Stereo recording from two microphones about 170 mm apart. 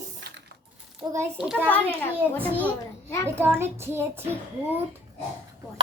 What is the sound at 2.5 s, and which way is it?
A child's voice, 10° right (ahead or behind).